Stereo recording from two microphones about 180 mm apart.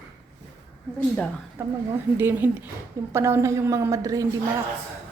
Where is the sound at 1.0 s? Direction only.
5° left (ahead or behind).